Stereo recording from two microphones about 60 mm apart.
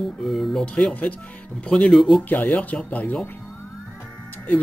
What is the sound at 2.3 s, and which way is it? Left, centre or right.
Speech, left.